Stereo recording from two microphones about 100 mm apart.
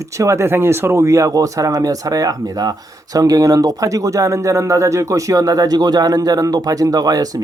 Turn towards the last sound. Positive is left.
turn(degrees=-40)  # may be behind; listen again after turning